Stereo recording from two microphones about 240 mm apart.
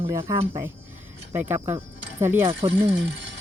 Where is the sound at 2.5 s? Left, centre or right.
Right.